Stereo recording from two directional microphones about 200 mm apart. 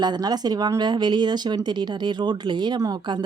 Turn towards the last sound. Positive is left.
turn(degrees=-20)  # may be behind; listen again after turning